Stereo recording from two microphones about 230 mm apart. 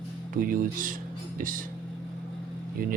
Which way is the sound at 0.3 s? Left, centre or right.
Right.